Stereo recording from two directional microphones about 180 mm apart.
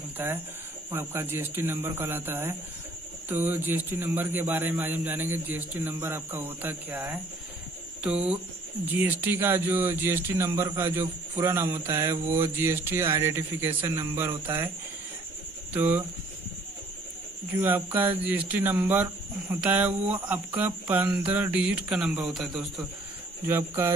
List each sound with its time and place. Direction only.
0.2 s speech: 10° right (ahead or behind)
15.7 s speech: 10° right (ahead or behind)
17.6 s speech: 10° right (ahead or behind)
23.4 s speech: 10° right (ahead or behind)